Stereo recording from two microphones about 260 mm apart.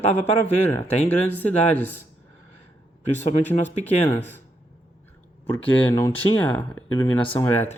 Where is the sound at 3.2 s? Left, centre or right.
Left.